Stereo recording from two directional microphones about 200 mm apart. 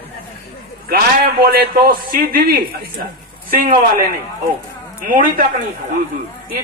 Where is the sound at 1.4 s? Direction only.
50° right (ahead or behind).